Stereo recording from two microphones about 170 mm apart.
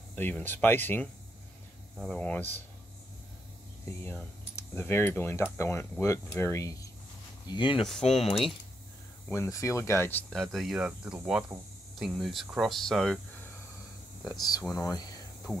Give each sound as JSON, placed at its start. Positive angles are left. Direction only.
{"t": 0.1, "sound": "speech", "side_deg": 10}
{"t": 4.0, "sound": "speech", "side_deg": 15}
{"t": 7.4, "sound": "speech", "side_deg": 25}
{"t": 9.3, "sound": "speech", "side_deg": 20}
{"t": 10.3, "sound": "speech", "side_deg": 0}
{"t": 14.2, "sound": "speech", "side_deg": 20}